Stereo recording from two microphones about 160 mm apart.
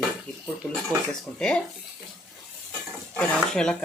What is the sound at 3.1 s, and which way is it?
Speech, 5° left (ahead or behind).